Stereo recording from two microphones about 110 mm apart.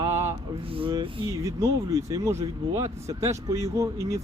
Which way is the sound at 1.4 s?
30° right (ahead or behind).